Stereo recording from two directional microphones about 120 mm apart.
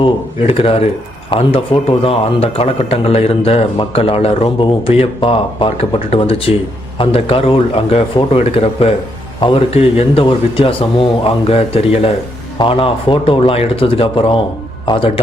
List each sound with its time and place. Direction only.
0.0 s a man's voice: 50° left (ahead or behind)